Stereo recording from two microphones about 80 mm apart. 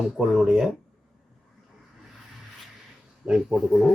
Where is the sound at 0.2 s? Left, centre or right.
Centre.